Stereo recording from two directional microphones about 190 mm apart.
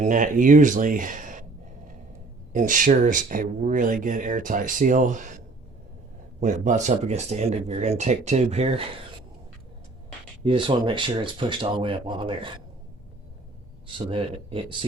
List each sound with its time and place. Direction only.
0.0 s speech: 45° right (ahead or behind)
2.5 s speech: 45° right (ahead or behind)
6.4 s speech: 40° right (ahead or behind)
10.4 s speech: 30° right (ahead or behind)
13.8 s speech: 30° right (ahead or behind)